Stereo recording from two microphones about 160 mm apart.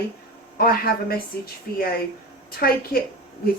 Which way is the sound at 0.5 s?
70° left (ahead or behind).